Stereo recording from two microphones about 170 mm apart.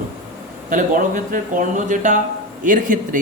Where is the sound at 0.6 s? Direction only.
50° right (ahead or behind).